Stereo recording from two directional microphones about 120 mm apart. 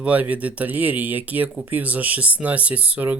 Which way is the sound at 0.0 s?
10° right (ahead or behind).